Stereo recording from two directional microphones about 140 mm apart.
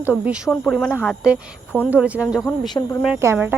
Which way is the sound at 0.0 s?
10° right (ahead or behind).